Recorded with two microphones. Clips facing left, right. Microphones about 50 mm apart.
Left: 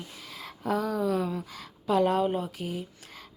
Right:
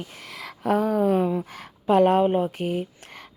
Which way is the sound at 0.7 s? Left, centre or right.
Right.